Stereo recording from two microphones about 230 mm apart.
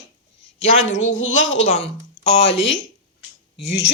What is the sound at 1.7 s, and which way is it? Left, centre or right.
Speech, left.